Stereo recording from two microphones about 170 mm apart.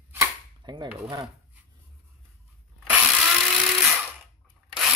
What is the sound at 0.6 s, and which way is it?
Cutlery, 25° right (ahead or behind).